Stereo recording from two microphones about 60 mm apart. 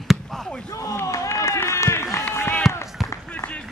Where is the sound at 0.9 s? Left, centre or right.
Left.